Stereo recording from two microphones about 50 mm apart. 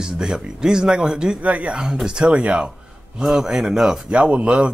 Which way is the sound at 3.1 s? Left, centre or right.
Centre.